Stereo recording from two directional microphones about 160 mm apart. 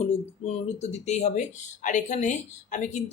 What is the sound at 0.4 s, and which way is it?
Speech, 45° left (ahead or behind).